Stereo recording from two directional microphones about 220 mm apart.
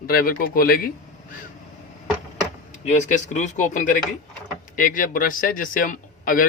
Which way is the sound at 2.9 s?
35° left (ahead or behind).